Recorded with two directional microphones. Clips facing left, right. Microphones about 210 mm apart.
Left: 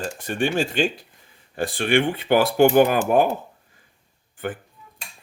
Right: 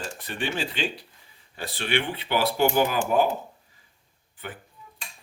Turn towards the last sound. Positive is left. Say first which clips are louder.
# left 10 dB
turn(degrees=50)  # may be behind; listen again after turning